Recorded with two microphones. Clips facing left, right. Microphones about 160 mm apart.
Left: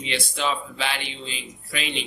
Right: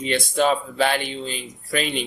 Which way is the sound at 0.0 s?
45° right (ahead or behind).